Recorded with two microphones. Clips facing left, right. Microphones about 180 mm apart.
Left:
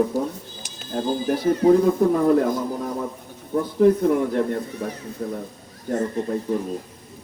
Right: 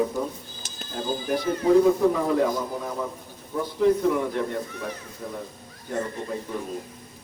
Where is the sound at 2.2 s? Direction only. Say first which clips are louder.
Left 5 dB; 50° left (ahead or behind).